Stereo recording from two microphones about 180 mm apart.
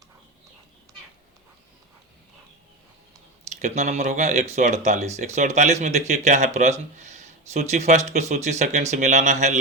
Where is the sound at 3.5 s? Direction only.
40° right (ahead or behind).